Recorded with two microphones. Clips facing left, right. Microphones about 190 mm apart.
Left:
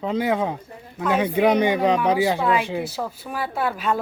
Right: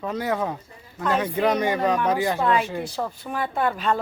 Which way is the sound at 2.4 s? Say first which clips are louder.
Left 1 dB; 5° left (ahead or behind).